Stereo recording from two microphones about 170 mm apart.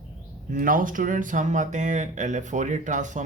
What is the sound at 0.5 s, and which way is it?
Speech, 55° right (ahead or behind).